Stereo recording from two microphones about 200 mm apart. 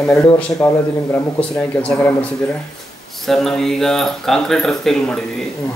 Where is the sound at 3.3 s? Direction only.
Centre (ahead or behind).